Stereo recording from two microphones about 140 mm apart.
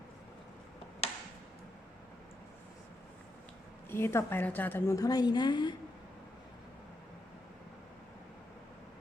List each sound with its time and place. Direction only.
3.8 s a woman's voice: 15° left (ahead or behind)